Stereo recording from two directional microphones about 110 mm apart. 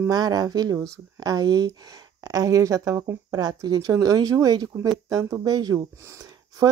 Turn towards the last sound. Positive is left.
turn(degrees=-35)  # may be behind; listen again after turning